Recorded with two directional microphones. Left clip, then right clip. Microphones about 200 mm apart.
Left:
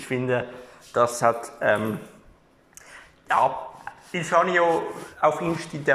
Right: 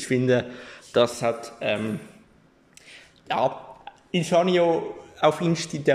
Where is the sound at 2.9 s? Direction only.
25° right (ahead or behind).